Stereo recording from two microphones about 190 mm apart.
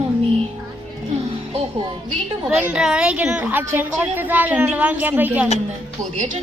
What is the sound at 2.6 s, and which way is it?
A woman's voice, 5° right (ahead or behind).